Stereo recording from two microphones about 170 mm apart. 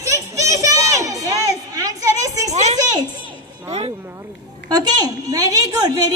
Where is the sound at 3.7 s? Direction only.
40° right (ahead or behind).